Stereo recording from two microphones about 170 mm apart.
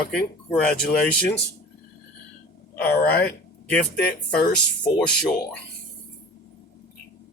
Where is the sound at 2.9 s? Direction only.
65° left (ahead or behind).